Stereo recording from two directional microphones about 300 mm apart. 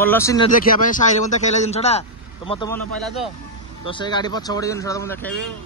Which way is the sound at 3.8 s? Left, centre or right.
Centre.